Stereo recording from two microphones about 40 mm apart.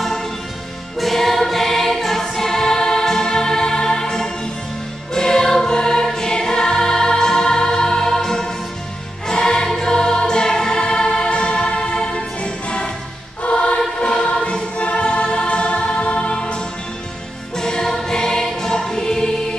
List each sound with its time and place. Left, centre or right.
0.9 s music: centre; by 12.9 s left
13.4 s choir: left
17.6 s music: centre